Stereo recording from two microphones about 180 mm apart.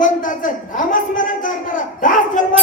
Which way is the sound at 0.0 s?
45° left (ahead or behind).